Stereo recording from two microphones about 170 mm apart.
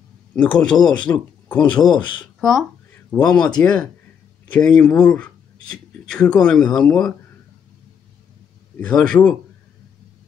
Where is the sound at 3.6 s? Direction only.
5° left (ahead or behind).